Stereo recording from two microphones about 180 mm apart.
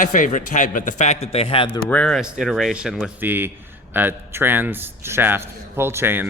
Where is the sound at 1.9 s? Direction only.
10° left (ahead or behind).